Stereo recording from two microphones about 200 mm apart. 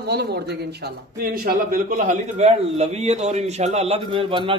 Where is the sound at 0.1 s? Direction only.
55° right (ahead or behind).